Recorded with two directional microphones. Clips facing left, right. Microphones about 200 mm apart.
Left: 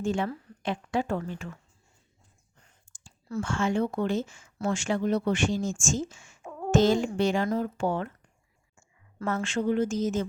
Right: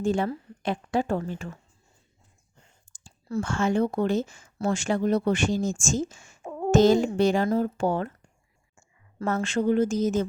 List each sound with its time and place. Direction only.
0.0 s speech: 35° right (ahead or behind)
2.9 s speech: 35° right (ahead or behind)